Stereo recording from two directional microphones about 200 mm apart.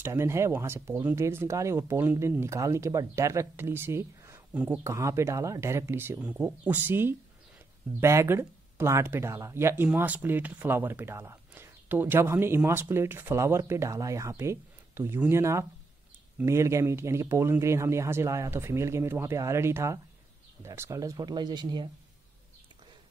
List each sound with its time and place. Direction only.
0.0 s speech: 15° right (ahead or behind)